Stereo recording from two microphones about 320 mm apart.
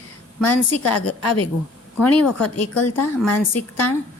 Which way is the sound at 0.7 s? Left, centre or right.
Left.